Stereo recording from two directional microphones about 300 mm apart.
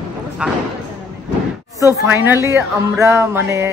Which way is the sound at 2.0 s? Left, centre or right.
Centre.